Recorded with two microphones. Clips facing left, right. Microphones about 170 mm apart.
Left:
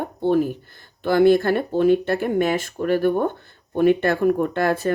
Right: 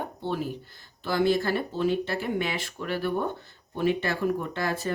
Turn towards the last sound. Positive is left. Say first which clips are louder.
# left 9 dB
turn(degrees=55)  # may be behind; listen again after turning